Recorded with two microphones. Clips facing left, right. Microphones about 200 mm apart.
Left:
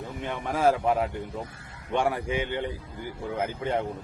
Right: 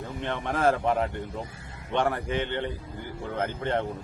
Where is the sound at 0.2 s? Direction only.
10° left (ahead or behind).